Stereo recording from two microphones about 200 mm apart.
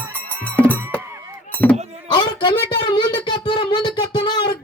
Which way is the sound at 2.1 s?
20° left (ahead or behind).